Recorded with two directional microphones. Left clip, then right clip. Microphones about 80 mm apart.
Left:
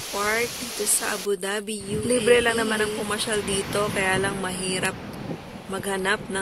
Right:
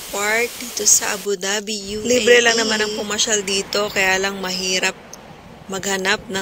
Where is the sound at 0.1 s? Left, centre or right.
Right.